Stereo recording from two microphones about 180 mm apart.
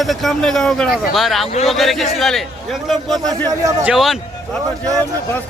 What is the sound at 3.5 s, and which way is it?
Speech, 20° right (ahead or behind).